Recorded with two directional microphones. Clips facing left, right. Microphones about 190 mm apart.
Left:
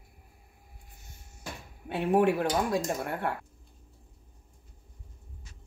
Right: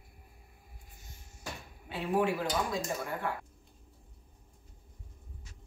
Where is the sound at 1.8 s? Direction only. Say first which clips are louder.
Left 6 dB; 60° left (ahead or behind).